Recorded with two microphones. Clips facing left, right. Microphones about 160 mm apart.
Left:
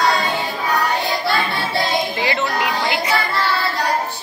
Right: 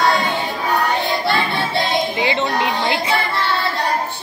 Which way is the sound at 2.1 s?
25° right (ahead or behind).